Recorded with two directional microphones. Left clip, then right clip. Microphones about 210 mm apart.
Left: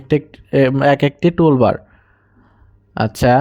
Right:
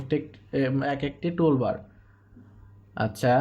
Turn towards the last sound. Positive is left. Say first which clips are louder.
# left 9 dB
turn(degrees=40)  # may be behind; listen again after turning